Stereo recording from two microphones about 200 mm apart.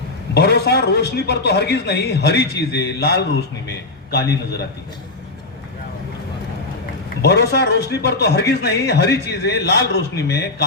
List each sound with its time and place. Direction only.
0.3 s a man's voice: 55° left (ahead or behind)
7.2 s a man's voice: 55° left (ahead or behind)